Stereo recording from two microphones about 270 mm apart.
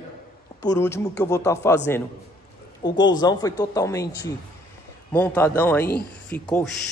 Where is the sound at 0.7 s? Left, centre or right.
Centre.